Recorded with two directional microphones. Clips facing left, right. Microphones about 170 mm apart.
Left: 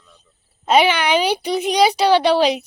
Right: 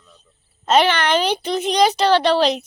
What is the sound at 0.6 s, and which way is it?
Speech, 10° left (ahead or behind).